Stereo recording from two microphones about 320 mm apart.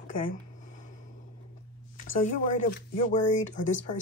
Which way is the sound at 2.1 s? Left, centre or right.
Left.